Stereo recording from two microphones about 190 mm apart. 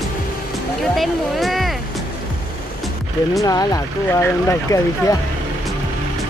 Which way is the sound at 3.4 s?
20° left (ahead or behind).